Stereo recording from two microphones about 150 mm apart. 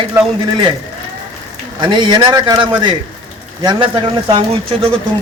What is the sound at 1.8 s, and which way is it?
A man's voice, 30° right (ahead or behind).